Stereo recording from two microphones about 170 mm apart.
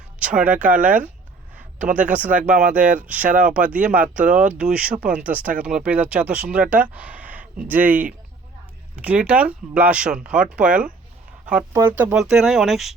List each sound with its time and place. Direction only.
0.2 s speech: 5° right (ahead or behind)
3.2 s speech: 50° right (ahead or behind)
3.5 s speech: 10° right (ahead or behind)
12.1 s speech: centre (ahead or behind)